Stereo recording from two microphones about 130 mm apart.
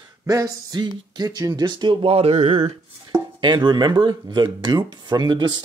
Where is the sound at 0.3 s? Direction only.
30° right (ahead or behind); by 2.8 s 55° right (ahead or behind).